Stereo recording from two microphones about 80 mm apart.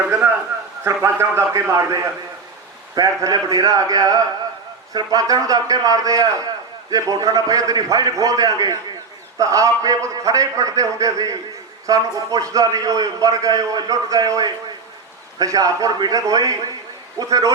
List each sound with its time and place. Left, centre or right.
0.9 s a man's voice: right